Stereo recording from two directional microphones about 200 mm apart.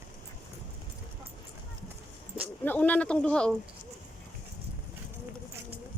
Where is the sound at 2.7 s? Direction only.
5° left (ahead or behind).